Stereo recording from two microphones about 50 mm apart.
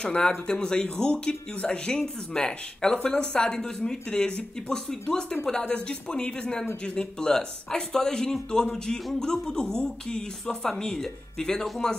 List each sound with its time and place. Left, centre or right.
0.0 s speech: centre